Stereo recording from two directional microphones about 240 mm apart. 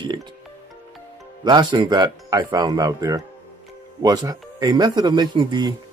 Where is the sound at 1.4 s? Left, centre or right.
Centre.